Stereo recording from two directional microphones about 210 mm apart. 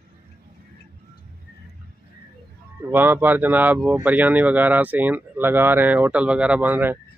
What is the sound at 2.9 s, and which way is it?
Speech, 10° right (ahead or behind).